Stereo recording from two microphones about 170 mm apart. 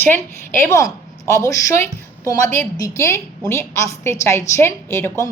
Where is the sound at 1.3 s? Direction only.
20° left (ahead or behind).